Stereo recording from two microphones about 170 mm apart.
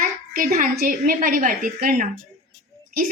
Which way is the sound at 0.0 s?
50° right (ahead or behind).